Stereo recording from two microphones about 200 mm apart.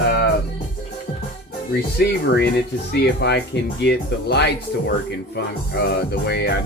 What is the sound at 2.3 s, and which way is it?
Speech, 55° left (ahead or behind).